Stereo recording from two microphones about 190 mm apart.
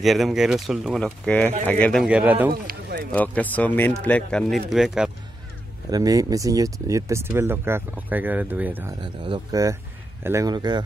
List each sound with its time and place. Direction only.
0.0 s speech: centre (ahead or behind)
2.5 s a sound: 50° right (ahead or behind)
3.1 s speech: 10° left (ahead or behind)
5.9 s speech: 20° right (ahead or behind)
9.0 s speech: 25° right (ahead or behind)